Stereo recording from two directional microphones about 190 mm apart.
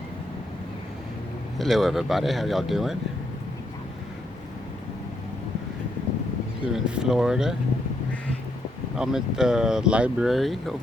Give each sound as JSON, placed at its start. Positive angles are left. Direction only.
{"t": 1.5, "sound": "speech", "side_deg": 0}
{"t": 6.7, "sound": "speech", "side_deg": -5}
{"t": 9.0, "sound": "speech", "side_deg": -5}